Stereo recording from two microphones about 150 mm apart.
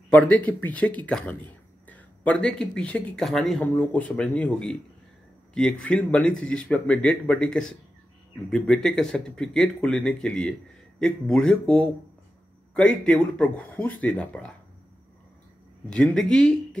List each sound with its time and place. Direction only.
0.5 s speech: 10° left (ahead or behind)
15.9 s speech: 5° left (ahead or behind)